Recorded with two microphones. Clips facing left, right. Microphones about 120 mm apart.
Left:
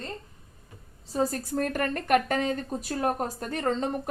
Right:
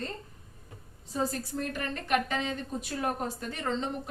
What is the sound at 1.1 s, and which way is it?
A woman's voice, 40° left (ahead or behind).